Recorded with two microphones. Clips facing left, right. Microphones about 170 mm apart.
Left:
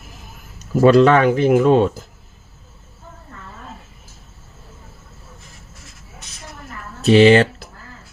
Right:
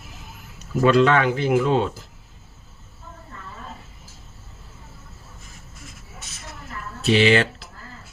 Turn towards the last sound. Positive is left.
turn(degrees=40)  # may be behind; listen again after turning